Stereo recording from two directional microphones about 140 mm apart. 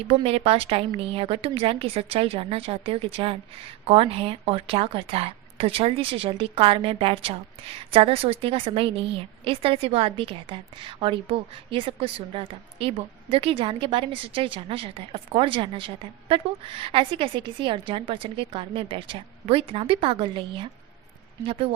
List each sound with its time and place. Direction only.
0.0 s a woman's voice: 45° right (ahead or behind)